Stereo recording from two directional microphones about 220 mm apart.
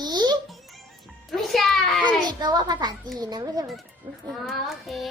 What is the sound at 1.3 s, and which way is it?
Music, centre (ahead or behind).